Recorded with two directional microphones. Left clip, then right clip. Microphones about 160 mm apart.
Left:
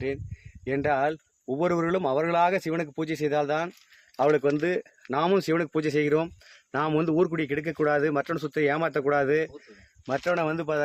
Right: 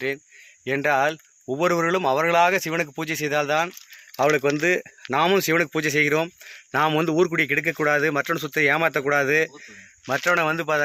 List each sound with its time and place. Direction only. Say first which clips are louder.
0.6 s speech: right 4 dB; 15° right (ahead or behind)
10.1 s speech: right 5 dB; 15° right (ahead or behind)